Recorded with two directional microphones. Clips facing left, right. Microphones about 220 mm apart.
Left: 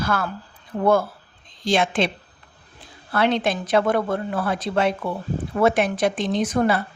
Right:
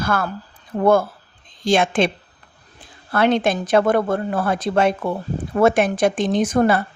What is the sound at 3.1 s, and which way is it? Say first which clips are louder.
A woman's voice: right 3 dB; 50° right (ahead or behind).